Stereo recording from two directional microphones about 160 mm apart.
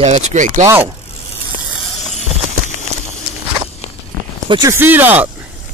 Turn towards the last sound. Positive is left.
turn(degrees=-10)  # may be behind; listen again after turning